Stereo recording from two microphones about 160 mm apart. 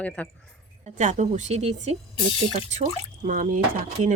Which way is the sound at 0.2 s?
10° left (ahead or behind).